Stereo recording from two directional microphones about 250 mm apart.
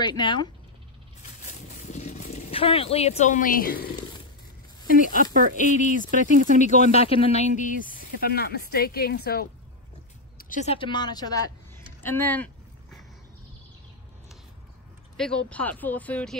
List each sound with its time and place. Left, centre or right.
0.0 s speech: centre
1.7 s a sound: left
5.1 s speech: right
5.6 s speech: left
6.3 s speech: right
6.6 s speech: left; by 12.4 s centre
15.1 s speech: centre